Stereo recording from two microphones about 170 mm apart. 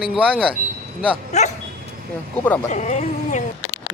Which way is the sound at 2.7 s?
45° left (ahead or behind).